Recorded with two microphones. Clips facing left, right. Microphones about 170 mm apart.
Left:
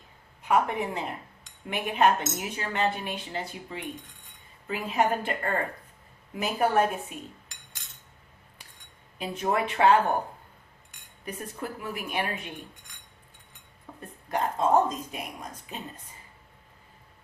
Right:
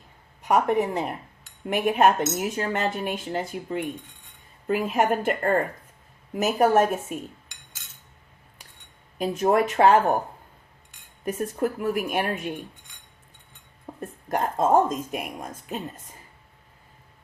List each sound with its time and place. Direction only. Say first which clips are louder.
0.4 s speech: right 4 dB; 40° right (ahead or behind)
9.1 s speech: right 7 dB; 45° right (ahead or behind)
11.3 s speech: right 10 dB; 45° right (ahead or behind)
14.0 s speech: right 3 dB; 45° right (ahead or behind)